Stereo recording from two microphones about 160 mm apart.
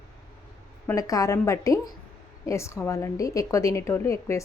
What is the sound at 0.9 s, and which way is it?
A woman's voice, 20° left (ahead or behind).